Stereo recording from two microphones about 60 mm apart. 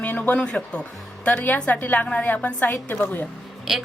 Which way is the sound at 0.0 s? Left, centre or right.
Left.